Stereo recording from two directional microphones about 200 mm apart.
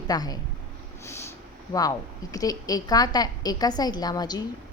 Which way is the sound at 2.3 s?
20° left (ahead or behind).